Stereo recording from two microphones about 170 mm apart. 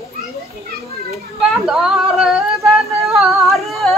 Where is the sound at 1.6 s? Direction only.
5° right (ahead or behind).